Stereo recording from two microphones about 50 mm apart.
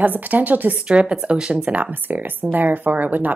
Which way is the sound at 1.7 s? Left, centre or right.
Right.